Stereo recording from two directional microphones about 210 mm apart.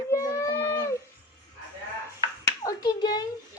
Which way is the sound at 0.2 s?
15° left (ahead or behind).